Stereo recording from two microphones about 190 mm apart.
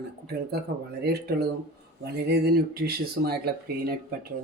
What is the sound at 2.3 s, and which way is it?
Speech, 55° right (ahead or behind).